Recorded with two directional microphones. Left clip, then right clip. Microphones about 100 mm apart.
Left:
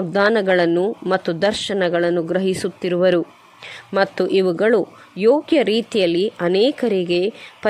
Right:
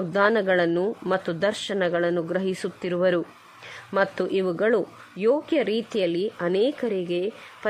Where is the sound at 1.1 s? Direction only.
35° left (ahead or behind).